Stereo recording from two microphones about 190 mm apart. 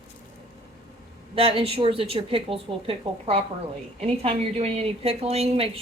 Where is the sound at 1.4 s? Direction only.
30° right (ahead or behind).